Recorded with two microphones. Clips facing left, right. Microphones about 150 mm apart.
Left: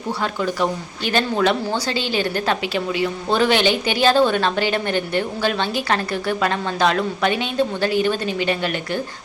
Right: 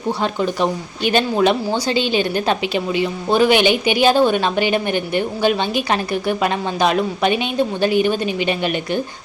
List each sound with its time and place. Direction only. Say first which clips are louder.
0.2 s speech: even; 20° right (ahead or behind)